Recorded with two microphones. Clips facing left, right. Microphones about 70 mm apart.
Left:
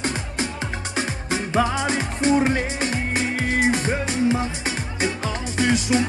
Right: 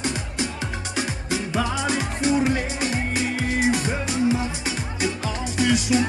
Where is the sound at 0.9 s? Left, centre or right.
Left.